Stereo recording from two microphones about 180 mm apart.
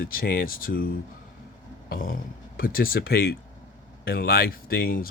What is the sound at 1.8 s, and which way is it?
Speech, 50° left (ahead or behind).